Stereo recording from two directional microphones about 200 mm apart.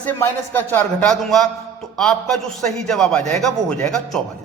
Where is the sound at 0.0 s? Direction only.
10° left (ahead or behind).